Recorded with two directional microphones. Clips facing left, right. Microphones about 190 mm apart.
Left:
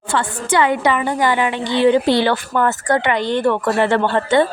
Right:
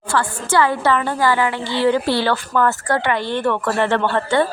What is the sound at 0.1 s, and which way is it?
A woman's voice, 20° left (ahead or behind).